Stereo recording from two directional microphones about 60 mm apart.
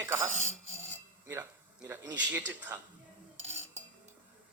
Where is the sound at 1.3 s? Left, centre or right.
Right.